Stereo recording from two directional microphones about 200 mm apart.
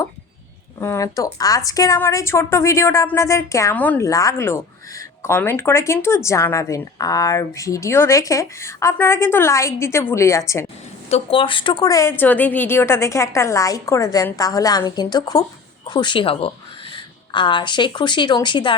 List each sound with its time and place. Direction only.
0.8 s a woman's voice: 15° left (ahead or behind)
11.1 s a woman's voice: 25° left (ahead or behind)